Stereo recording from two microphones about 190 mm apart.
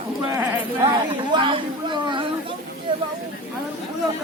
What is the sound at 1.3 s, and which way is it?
Chatter, 25° right (ahead or behind).